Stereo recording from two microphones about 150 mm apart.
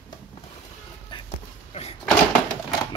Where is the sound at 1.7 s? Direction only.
45° left (ahead or behind).